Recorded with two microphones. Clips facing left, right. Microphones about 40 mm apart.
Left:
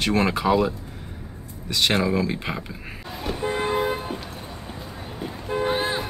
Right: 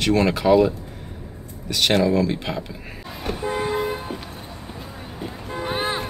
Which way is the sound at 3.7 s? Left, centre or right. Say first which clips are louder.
Left 1 dB; centre.